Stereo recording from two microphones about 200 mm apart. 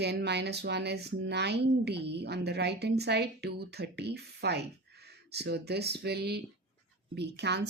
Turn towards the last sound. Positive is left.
turn(degrees=-60)  # may be behind; listen again after turning